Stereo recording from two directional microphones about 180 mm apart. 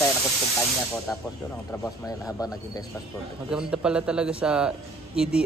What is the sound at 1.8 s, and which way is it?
Speech, 15° left (ahead or behind).